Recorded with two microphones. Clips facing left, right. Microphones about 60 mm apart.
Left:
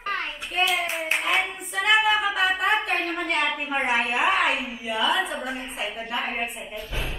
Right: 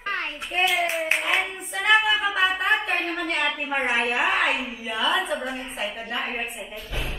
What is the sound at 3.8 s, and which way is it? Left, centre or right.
Speech, centre.